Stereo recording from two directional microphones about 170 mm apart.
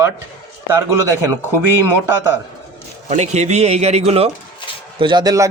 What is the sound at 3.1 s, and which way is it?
Speech, 40° right (ahead or behind).